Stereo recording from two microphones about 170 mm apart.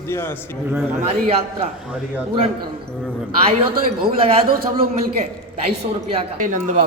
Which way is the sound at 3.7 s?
60° right (ahead or behind).